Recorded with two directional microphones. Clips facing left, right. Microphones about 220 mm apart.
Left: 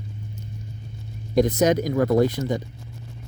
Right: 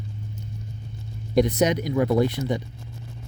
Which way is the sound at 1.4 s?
45° left (ahead or behind).